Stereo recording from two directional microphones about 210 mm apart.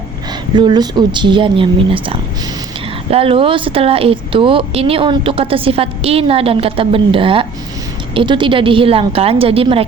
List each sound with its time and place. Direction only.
0.5 s speech: 20° right (ahead or behind)